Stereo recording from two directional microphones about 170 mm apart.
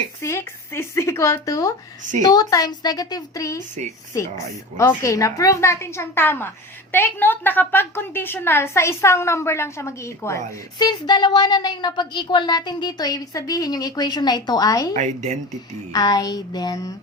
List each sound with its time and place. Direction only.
0.2 s a woman's voice: 15° left (ahead or behind)
14.9 s speech: 45° right (ahead or behind)
15.9 s a woman's voice: 20° left (ahead or behind)